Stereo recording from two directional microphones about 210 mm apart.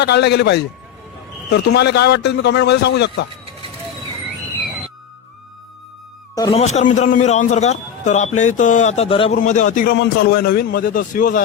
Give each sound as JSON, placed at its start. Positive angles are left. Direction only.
{"t": 0.0, "sound": "a man's voice", "side_deg": 55}
{"t": 6.3, "sound": "a man's voice", "side_deg": 25}